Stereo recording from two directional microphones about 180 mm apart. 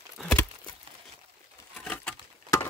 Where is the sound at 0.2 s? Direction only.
5° left (ahead or behind).